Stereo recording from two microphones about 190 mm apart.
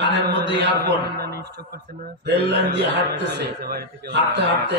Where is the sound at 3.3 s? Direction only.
60° right (ahead or behind).